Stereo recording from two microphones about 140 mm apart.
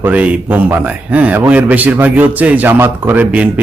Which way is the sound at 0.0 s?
10° right (ahead or behind).